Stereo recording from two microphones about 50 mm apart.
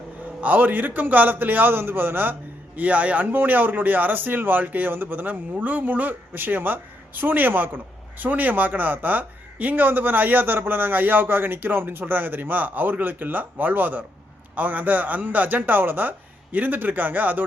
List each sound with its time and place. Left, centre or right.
0.4 s speech: right
2.7 s speech: right